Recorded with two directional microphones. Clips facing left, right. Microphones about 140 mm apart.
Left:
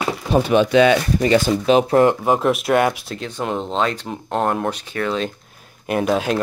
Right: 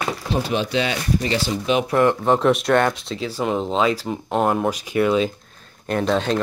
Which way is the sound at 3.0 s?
5° right (ahead or behind).